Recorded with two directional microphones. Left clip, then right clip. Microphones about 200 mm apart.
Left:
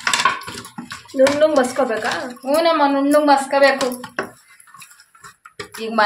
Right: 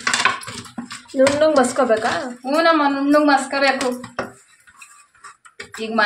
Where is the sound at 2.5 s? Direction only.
20° left (ahead or behind).